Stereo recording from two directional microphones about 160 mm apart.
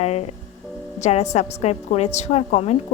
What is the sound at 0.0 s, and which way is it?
Speech, 40° left (ahead or behind).